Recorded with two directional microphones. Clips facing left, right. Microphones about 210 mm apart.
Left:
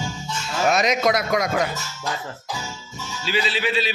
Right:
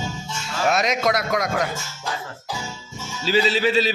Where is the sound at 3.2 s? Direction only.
40° right (ahead or behind).